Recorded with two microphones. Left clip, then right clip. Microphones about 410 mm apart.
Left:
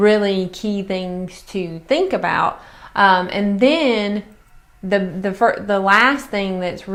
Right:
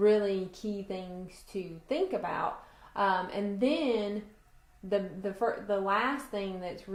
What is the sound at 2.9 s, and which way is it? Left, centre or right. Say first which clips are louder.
Speech: left 15 dB; left.